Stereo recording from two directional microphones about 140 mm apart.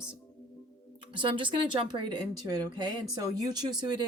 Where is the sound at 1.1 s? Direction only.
35° right (ahead or behind).